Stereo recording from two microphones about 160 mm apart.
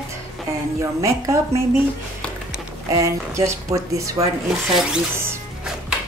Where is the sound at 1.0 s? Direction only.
20° right (ahead or behind).